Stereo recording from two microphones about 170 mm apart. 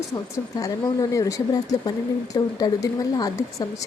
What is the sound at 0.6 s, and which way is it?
Speech, 20° left (ahead or behind).